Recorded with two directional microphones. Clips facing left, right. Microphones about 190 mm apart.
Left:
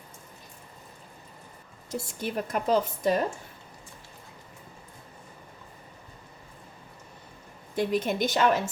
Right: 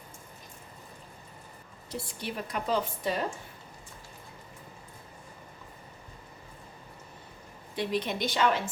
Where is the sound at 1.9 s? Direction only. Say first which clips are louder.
Left 5 dB; 45° left (ahead or behind).